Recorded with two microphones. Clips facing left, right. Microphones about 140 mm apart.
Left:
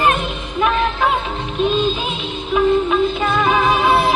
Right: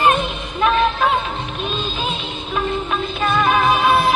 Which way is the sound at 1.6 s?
20° left (ahead or behind).